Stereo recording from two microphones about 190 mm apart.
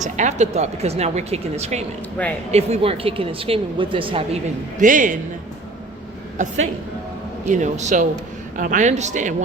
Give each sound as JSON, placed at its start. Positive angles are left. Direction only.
{"t": 0.0, "sound": "a woman's voice", "side_deg": -40}
{"t": 4.8, "sound": "speech", "side_deg": -45}
{"t": 6.4, "sound": "speech", "side_deg": -40}